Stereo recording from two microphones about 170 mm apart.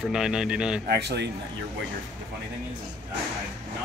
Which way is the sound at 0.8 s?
75° right (ahead or behind).